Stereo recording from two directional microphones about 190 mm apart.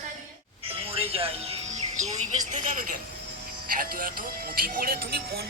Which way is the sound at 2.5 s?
45° right (ahead or behind).